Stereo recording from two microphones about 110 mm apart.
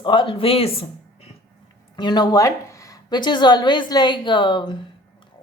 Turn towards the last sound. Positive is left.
turn(degrees=45)  # may be behind; listen again after turning